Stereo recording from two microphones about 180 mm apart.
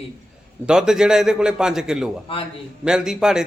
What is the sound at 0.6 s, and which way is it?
A man's voice, 5° right (ahead or behind).